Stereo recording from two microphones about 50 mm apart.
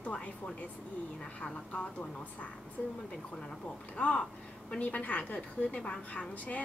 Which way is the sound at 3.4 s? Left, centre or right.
Centre.